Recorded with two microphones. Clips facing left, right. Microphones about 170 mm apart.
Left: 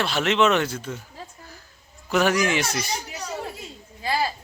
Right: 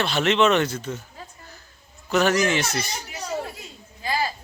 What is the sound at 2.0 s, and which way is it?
Speech, 10° left (ahead or behind).